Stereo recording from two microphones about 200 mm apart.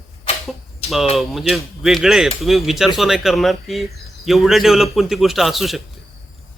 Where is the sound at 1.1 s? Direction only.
Centre (ahead or behind).